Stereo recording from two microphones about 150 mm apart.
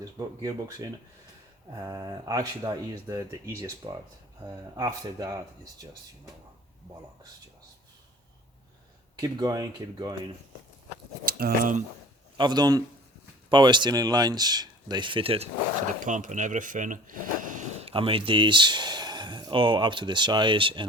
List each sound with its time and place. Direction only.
0.0 s speech: 25° right (ahead or behind)
9.2 s speech: 25° right (ahead or behind)
11.3 s speech: 85° right
12.4 s speech: 30° right (ahead or behind)
16.0 s speech: 55° right (ahead or behind)
17.7 s speech: 40° right (ahead or behind)